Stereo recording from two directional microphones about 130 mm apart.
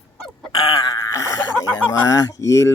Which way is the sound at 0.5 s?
40° left (ahead or behind).